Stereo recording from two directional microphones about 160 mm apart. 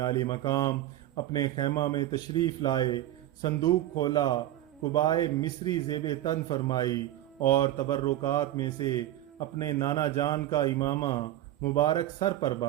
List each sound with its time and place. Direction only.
0.0 s speech: 25° left (ahead or behind)